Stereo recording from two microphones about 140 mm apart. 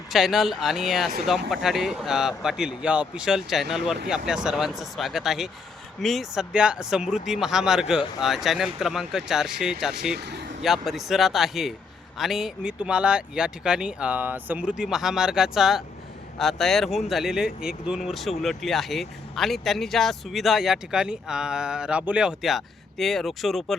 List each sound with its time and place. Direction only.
0.1 s speech: centre (ahead or behind)